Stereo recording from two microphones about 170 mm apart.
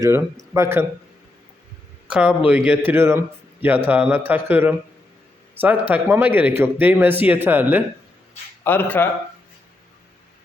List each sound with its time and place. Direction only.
0.0 s a man's voice: 15° right (ahead or behind)
2.0 s a man's voice: 5° right (ahead or behind)
8.6 s a man's voice: 10° left (ahead or behind)